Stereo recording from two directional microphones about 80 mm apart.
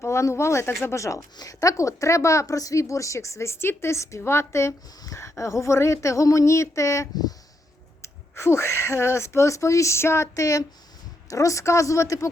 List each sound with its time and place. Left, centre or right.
0.0 s speech: left
8.0 s speech: left